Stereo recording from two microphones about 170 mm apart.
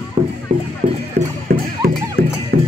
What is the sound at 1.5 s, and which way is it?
Music, 55° right (ahead or behind).